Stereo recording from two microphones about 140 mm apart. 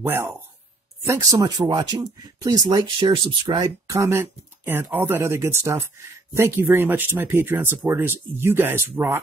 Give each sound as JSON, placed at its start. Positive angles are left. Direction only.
{"t": 0.0, "sound": "speech", "side_deg": -15}
{"t": 3.9, "sound": "speech", "side_deg": -20}